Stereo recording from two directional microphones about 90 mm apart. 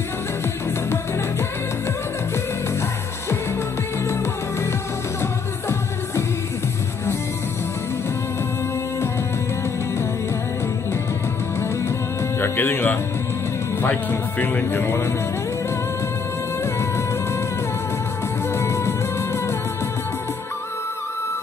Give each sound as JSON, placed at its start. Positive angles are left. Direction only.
{"t": 5.2, "sound": "music", "side_deg": 30}
{"t": 12.4, "sound": "music", "side_deg": 25}
{"t": 14.4, "sound": "speech", "side_deg": 25}
{"t": 18.6, "sound": "music", "side_deg": 30}